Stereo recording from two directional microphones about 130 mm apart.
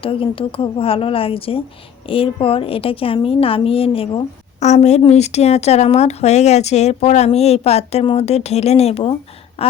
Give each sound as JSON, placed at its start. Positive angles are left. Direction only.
{"t": 0.0, "sound": "a woman's voice", "side_deg": 45}
{"t": 4.6, "sound": "a woman's voice", "side_deg": 60}
{"t": 9.6, "sound": "a sound", "side_deg": 50}